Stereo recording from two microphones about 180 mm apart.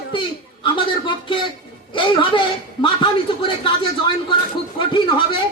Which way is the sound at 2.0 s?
25° left (ahead or behind).